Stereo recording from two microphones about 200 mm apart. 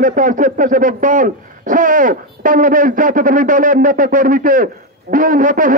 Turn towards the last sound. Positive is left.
turn(degrees=-40)  # may be behind; listen again after turning